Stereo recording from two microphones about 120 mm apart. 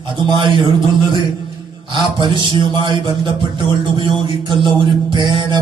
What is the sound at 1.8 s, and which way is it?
A man's voice, 40° right (ahead or behind).